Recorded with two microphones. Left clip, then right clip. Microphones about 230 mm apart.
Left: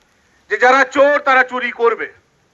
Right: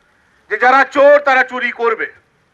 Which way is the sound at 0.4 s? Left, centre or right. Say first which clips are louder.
Right 1 dB; right.